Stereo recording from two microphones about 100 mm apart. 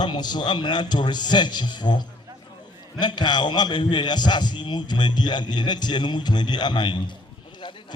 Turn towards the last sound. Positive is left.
turn(degrees=50)  # may be behind; listen again after turning